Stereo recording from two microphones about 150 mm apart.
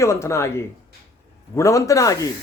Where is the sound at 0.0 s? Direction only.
20° left (ahead or behind).